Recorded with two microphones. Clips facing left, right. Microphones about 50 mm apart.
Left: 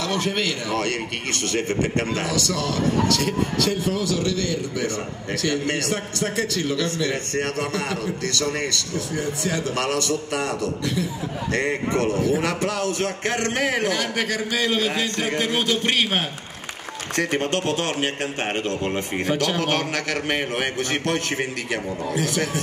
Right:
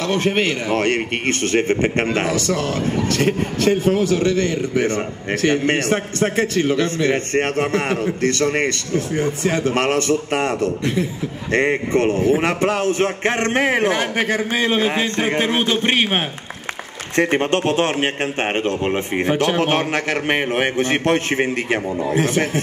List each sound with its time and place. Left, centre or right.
0.0 s a man's voice: right